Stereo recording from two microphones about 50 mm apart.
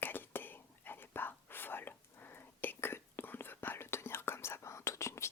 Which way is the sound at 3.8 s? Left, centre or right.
Left.